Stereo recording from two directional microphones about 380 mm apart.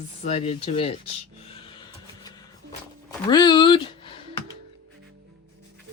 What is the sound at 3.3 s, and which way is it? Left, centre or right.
Speech, centre.